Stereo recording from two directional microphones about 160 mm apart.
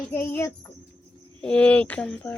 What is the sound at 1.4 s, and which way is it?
Speech, 5° left (ahead or behind).